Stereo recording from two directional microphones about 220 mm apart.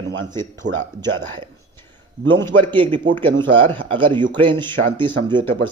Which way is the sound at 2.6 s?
25° right (ahead or behind).